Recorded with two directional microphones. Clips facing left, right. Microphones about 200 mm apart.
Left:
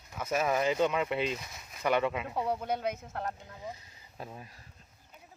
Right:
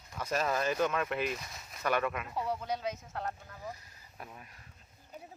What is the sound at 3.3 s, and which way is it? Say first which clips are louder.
Speech: left 1 dB; 20° left (ahead or behind).